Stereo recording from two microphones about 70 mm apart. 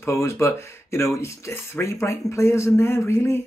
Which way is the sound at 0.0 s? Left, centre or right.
Left.